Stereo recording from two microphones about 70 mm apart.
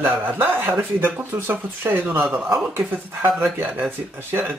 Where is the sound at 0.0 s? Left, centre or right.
Right.